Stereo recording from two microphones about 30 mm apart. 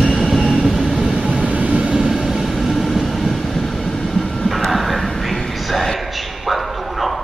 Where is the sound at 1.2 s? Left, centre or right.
Right.